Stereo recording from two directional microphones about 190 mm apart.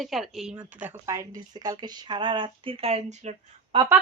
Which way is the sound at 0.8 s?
15° right (ahead or behind).